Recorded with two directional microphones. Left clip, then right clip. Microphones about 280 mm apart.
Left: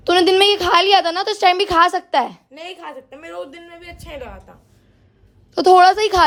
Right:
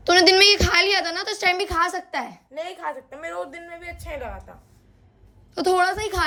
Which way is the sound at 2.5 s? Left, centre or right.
Left.